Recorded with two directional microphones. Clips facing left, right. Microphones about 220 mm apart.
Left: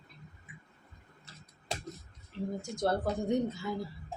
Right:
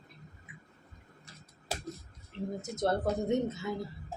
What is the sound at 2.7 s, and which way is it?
Speech, 20° right (ahead or behind).